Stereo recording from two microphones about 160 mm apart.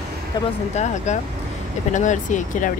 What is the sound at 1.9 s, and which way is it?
Speech, 50° left (ahead or behind).